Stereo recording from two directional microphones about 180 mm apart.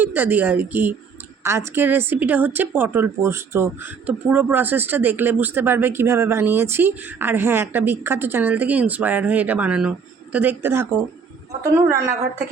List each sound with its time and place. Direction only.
0.0 s a woman's voice: 10° right (ahead or behind)